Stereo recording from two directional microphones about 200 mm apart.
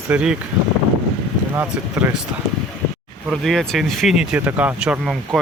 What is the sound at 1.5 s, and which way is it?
Speech, 10° right (ahead or behind).